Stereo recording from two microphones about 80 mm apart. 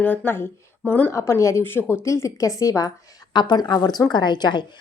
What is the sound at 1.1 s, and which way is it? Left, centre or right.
Speech, left.